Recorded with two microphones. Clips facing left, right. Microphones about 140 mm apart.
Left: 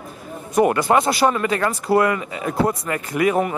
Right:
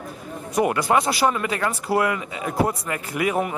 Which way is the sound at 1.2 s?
40° left (ahead or behind).